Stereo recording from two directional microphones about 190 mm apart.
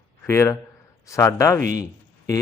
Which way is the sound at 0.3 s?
15° left (ahead or behind).